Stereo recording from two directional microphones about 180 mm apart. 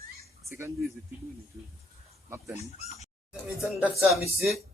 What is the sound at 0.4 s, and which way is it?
Speech, 15° right (ahead or behind).